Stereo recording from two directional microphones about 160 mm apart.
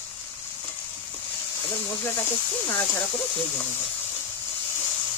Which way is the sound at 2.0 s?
15° left (ahead or behind).